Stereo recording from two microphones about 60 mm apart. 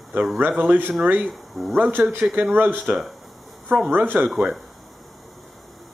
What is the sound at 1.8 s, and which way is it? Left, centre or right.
Speech, right.